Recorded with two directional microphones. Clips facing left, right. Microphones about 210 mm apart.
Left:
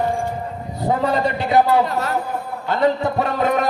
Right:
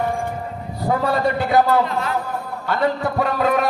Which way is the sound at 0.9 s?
20° left (ahead or behind).